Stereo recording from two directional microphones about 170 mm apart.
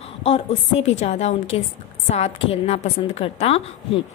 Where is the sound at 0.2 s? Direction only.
35° left (ahead or behind).